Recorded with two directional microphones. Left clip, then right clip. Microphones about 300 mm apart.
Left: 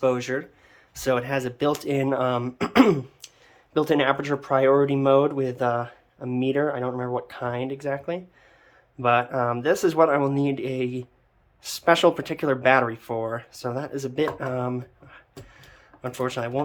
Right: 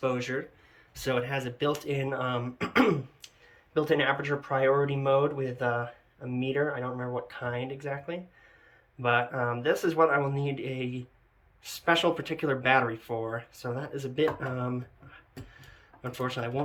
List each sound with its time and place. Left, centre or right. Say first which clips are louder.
0.0 s speech: left 7 dB; centre